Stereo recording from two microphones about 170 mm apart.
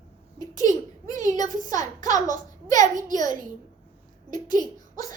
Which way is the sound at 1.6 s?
20° left (ahead or behind).